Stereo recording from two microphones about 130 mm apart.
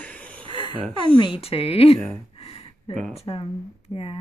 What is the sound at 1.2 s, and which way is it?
Speech, 45° left (ahead or behind).